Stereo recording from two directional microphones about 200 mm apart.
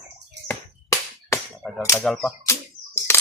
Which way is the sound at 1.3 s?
10° left (ahead or behind).